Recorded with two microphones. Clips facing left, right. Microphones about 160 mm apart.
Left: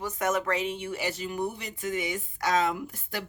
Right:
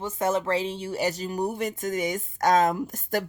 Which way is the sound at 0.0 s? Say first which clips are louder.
Right 3 dB; 30° right (ahead or behind).